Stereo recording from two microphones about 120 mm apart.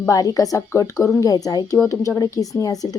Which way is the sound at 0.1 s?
30° left (ahead or behind).